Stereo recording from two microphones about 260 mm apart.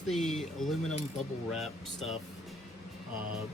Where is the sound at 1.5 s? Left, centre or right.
Centre.